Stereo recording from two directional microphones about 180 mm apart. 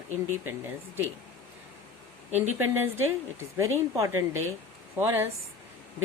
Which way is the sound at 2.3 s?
10° right (ahead or behind).